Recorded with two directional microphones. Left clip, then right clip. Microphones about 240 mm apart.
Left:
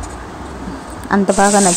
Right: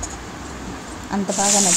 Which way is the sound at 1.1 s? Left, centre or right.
Left.